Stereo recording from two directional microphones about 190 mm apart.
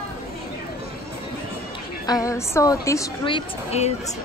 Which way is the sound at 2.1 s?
15° left (ahead or behind).